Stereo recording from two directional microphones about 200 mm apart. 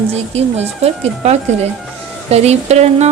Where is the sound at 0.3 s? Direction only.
30° right (ahead or behind).